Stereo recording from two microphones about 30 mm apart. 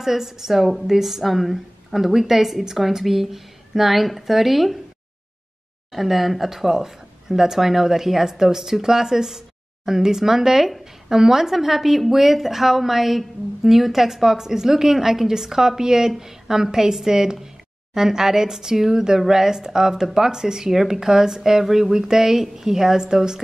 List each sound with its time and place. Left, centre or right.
0.0 s a woman's voice: centre
5.9 s a woman's voice: centre; by 23.4 s right